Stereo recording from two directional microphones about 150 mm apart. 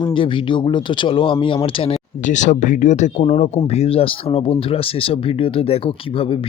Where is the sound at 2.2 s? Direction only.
55° left (ahead or behind).